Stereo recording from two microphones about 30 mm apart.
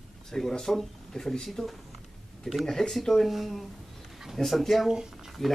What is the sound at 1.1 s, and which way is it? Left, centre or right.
Speech, centre.